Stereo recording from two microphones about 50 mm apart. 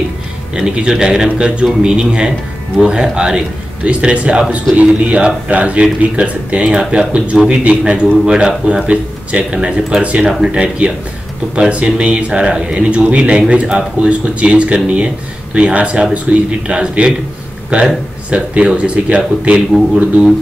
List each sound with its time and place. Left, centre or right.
0.6 s a man's voice: centre
12.0 s speech: right